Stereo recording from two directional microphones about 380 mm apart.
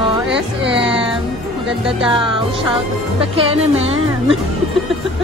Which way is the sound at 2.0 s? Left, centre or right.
Centre.